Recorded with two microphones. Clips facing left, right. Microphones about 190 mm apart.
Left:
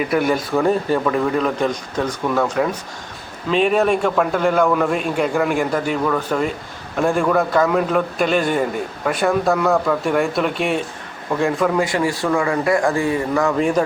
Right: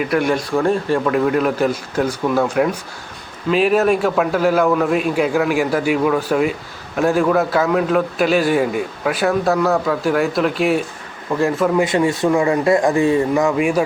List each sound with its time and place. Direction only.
0.0 s a man's voice: centre (ahead or behind)
11.8 s speech: 25° right (ahead or behind)